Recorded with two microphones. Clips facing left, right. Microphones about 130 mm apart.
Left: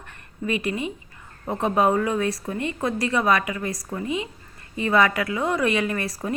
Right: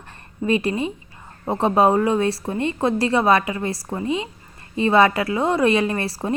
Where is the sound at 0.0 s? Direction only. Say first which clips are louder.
Right 4 dB; 30° right (ahead or behind).